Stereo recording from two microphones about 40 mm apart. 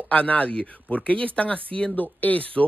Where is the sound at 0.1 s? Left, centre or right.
Left.